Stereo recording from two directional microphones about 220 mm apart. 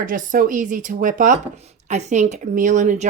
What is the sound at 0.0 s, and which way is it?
Speech, 40° right (ahead or behind).